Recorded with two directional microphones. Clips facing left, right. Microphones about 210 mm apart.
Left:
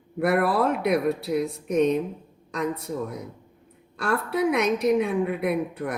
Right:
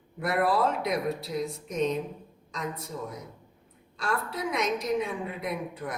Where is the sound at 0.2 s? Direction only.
60° left (ahead or behind).